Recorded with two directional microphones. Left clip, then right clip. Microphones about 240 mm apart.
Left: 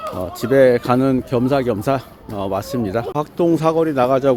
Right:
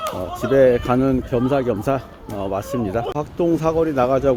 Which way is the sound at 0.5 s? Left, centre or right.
Centre.